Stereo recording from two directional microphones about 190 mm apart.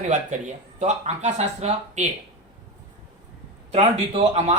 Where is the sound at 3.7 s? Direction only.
35° right (ahead or behind).